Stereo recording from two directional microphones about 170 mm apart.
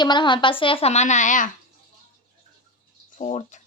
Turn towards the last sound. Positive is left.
turn(degrees=45)  # may be behind; listen again after turning